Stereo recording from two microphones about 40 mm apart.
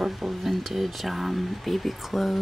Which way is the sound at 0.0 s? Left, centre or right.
Centre.